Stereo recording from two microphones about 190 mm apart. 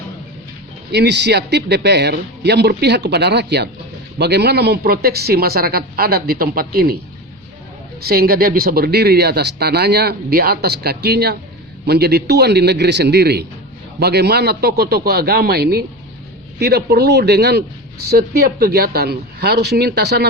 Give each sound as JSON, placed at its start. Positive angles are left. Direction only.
{"t": 0.9, "sound": "speech", "side_deg": -60}
{"t": 8.0, "sound": "speech", "side_deg": -55}